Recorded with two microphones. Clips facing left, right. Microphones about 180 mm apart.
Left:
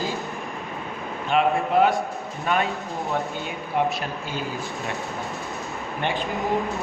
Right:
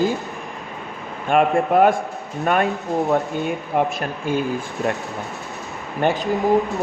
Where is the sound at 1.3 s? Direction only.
50° right (ahead or behind).